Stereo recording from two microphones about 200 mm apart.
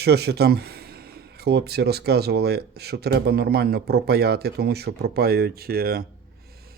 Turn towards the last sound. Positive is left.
turn(degrees=-50)  # may be behind; listen again after turning